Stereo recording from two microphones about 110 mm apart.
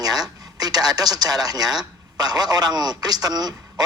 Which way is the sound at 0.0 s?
35° right (ahead or behind).